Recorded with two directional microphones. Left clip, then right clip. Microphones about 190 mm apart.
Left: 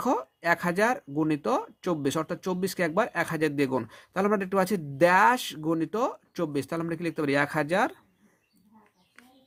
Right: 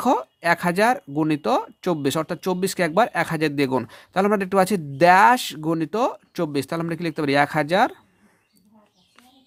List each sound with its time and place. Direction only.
0.0 s speech: 30° right (ahead or behind)